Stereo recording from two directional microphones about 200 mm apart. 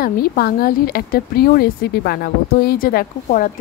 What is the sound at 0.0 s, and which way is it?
Speech, 50° left (ahead or behind).